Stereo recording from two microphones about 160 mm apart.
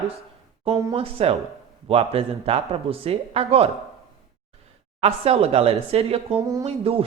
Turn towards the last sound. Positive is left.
turn(degrees=-40)  # may be behind; listen again after turning